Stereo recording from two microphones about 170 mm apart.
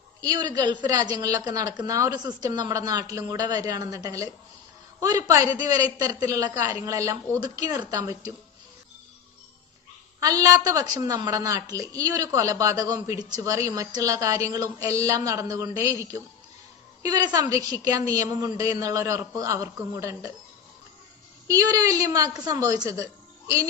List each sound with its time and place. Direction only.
0.2 s a woman's voice: 25° right (ahead or behind)
10.2 s a woman's voice: 20° right (ahead or behind)
21.4 s a woman's voice: 20° right (ahead or behind)